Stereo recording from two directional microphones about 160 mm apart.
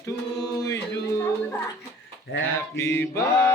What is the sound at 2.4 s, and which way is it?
Mantra, 15° left (ahead or behind).